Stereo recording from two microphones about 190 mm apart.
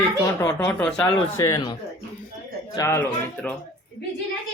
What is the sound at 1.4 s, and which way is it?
Speech, 15° left (ahead or behind).